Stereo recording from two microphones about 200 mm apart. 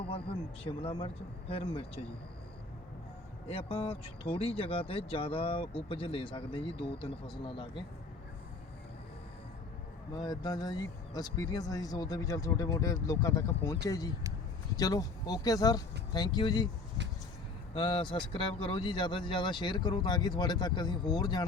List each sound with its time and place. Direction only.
0.0 s speech: 25° left (ahead or behind)
3.5 s speech: 30° left (ahead or behind)
10.2 s speech: 20° left (ahead or behind)
17.7 s speech: 25° left (ahead or behind)